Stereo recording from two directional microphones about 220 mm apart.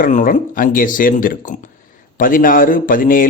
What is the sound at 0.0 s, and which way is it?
A man's voice, 40° left (ahead or behind).